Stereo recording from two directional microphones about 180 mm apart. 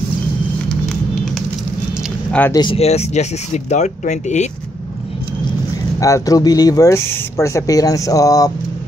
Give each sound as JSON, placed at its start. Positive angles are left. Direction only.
{"t": 2.5, "sound": "speech", "side_deg": 30}
{"t": 5.9, "sound": "speech", "side_deg": 15}